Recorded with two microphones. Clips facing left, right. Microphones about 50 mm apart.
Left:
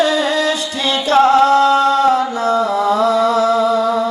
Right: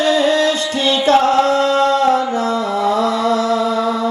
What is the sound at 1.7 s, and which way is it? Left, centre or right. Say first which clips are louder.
Mantra: left 1 dB; left.